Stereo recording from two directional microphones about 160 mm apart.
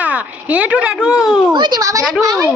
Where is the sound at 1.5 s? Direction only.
25° right (ahead or behind).